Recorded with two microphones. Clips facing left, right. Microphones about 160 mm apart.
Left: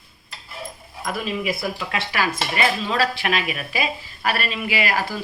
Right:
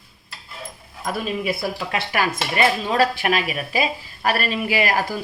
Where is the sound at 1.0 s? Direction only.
30° right (ahead or behind).